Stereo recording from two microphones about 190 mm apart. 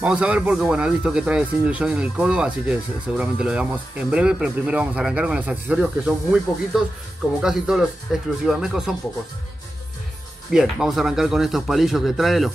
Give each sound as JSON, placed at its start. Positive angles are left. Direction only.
{"t": 0.0, "sound": "speech", "side_deg": -5}
{"t": 10.5, "sound": "speech", "side_deg": 0}